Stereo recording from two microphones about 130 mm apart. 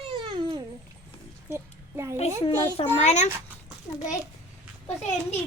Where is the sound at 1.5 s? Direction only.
20° right (ahead or behind).